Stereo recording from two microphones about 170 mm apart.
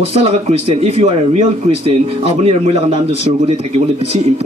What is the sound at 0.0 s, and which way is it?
A man's voice, 35° right (ahead or behind).